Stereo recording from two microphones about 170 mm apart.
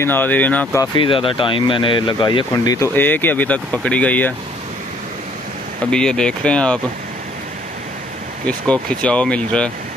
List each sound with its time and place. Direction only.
0.0 s speech: 10° left (ahead or behind)
0.9 s speech: 30° left (ahead or behind); by 4.3 s 10° left (ahead or behind)
5.9 s speech: 5° left (ahead or behind)
9.0 s speech: 5° left (ahead or behind)